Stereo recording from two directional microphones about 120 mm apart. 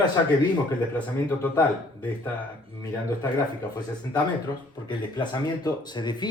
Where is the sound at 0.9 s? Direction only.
15° left (ahead or behind).